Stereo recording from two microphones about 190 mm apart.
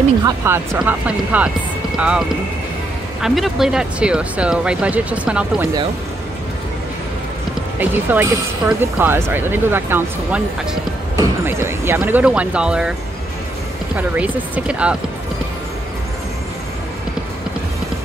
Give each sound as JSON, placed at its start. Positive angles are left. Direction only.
{"t": 0.2, "sound": "speech", "side_deg": -20}
{"t": 0.8, "sound": "speech", "side_deg": -5}
{"t": 7.8, "sound": "speech", "side_deg": -10}
{"t": 13.9, "sound": "speech", "side_deg": -10}